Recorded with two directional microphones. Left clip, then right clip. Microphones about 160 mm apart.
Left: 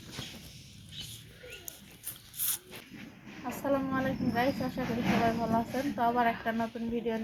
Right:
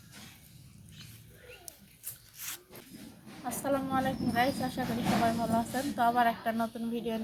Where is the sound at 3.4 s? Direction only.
5° right (ahead or behind).